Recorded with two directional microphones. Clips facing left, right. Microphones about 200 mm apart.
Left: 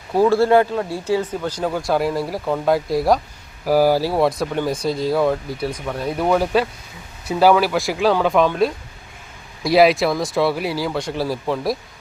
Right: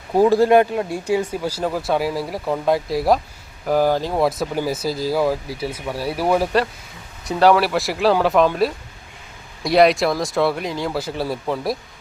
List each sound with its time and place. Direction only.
0.1 s speech: 15° right (ahead or behind)